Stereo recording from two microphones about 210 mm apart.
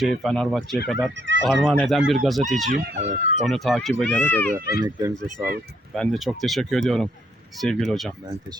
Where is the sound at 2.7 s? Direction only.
45° right (ahead or behind).